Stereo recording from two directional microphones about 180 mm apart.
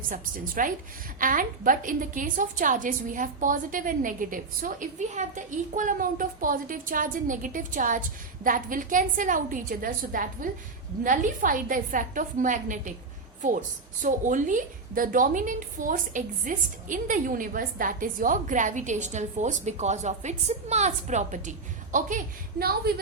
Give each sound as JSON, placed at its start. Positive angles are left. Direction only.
{"t": 0.1, "sound": "a woman's voice", "side_deg": -50}